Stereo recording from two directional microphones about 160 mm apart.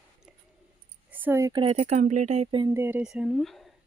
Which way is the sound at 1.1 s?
15° right (ahead or behind).